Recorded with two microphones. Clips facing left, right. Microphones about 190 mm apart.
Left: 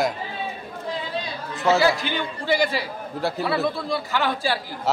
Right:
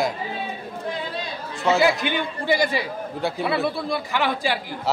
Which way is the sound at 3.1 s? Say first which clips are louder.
Left 1 dB; centre (ahead or behind).